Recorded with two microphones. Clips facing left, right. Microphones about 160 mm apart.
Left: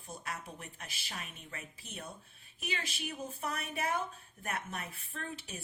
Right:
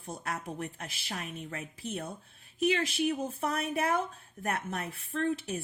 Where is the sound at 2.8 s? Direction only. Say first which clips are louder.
Right 11 dB; 45° right (ahead or behind).